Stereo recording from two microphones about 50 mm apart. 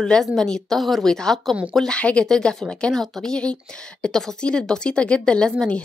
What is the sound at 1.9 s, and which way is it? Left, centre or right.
A woman's voice, left.